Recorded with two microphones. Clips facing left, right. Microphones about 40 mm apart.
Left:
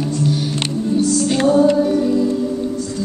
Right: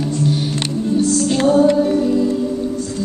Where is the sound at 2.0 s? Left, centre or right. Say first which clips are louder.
Even; centre.